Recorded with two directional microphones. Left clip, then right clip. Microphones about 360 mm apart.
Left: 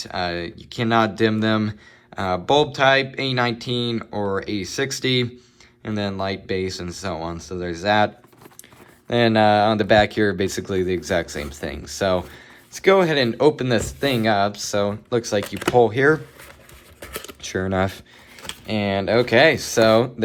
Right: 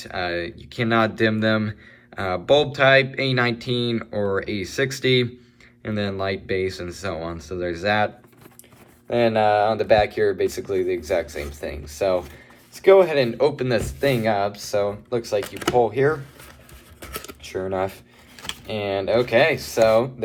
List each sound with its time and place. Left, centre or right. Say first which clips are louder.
0.0 s speech: left 1 dB; centre
9.0 s speech: left 2 dB; left
17.0 s computer keyboard: left 1 dB; centre
17.4 s speech: left 2 dB; left